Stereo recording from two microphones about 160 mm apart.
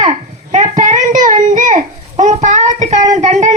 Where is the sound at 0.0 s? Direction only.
45° right (ahead or behind).